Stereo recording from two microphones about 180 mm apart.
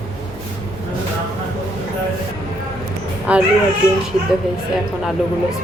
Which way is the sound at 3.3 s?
5° right (ahead or behind).